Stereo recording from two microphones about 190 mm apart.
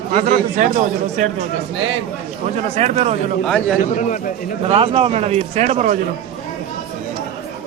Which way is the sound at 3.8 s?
45° left (ahead or behind).